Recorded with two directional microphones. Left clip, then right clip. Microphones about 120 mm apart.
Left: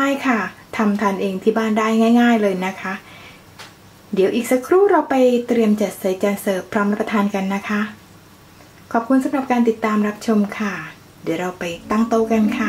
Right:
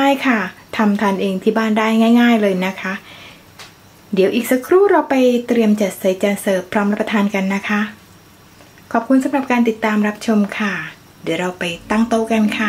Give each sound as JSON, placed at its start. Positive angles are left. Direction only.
{"t": 0.0, "sound": "speech", "side_deg": -30}
{"t": 4.1, "sound": "speech", "side_deg": -30}
{"t": 8.9, "sound": "speech", "side_deg": -25}